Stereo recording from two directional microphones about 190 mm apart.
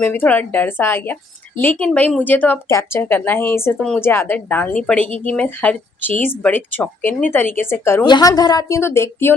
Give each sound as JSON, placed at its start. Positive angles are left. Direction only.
{"t": 0.0, "sound": "a woman's voice", "side_deg": 10}